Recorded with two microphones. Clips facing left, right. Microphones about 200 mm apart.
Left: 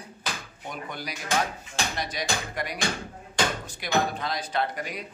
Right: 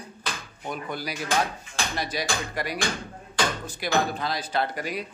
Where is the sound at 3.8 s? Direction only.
5° right (ahead or behind).